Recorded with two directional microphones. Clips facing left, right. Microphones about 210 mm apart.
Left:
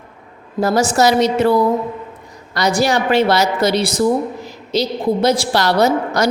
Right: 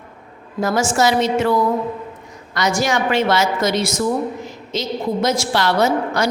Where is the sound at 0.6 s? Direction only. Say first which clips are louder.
Left 3 dB; 35° left (ahead or behind).